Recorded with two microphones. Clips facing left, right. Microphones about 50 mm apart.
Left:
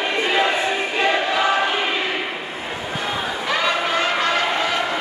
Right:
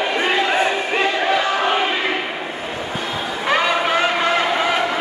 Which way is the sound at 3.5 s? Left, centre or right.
Right.